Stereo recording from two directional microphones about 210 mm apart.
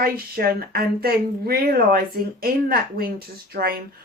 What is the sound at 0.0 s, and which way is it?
Speech, 45° right (ahead or behind).